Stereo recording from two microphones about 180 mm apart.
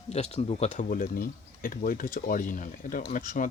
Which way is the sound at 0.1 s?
35° left (ahead or behind).